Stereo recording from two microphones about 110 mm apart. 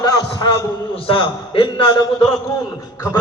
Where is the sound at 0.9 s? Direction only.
55° left (ahead or behind).